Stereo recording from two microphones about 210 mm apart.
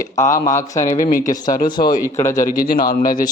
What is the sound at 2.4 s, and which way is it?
Speech, 45° left (ahead or behind).